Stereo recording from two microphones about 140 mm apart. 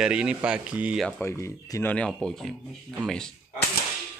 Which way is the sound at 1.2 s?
20° left (ahead or behind).